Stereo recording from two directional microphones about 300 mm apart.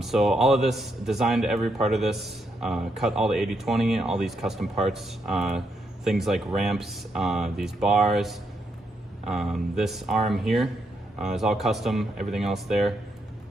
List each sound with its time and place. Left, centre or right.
0.0 s a man's voice: centre